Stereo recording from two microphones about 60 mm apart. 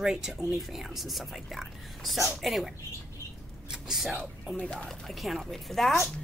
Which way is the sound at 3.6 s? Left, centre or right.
Centre.